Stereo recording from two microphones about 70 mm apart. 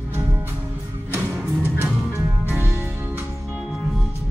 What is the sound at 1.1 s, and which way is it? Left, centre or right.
Music, right.